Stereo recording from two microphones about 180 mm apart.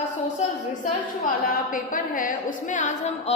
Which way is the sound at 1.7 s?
50° left (ahead or behind).